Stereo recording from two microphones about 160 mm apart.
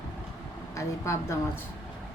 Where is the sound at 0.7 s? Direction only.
20° left (ahead or behind).